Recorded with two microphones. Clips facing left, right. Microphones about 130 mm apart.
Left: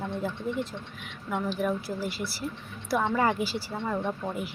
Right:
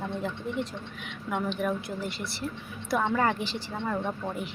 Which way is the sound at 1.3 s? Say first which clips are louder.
Left 1 dB; centre (ahead or behind).